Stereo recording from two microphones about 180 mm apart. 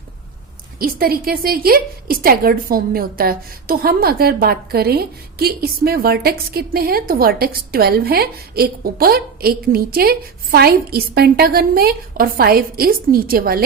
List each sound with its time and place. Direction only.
0.8 s a woman's voice: 55° right (ahead or behind)